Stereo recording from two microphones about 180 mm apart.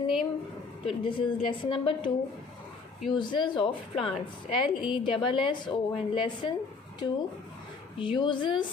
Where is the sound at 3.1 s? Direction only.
25° left (ahead or behind).